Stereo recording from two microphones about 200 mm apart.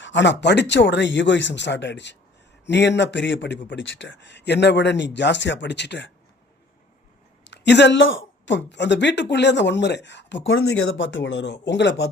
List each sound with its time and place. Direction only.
0.0 s a man's voice: 65° left (ahead or behind)
7.4 s speech: 60° left (ahead or behind)
8.4 s a man's voice: 60° left (ahead or behind)